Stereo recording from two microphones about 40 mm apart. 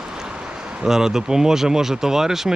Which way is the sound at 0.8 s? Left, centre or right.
Centre.